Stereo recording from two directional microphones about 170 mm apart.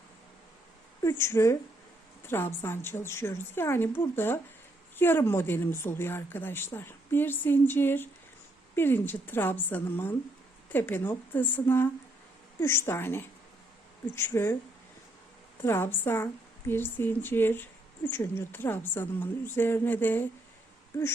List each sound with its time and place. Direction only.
1.0 s a woman's voice: 15° left (ahead or behind)
15.6 s a woman's voice: 15° left (ahead or behind)